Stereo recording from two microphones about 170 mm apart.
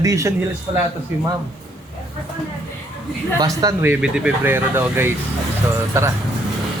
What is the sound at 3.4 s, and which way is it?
Music, 20° right (ahead or behind).